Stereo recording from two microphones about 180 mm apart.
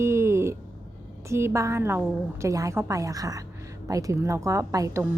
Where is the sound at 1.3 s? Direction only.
15° right (ahead or behind).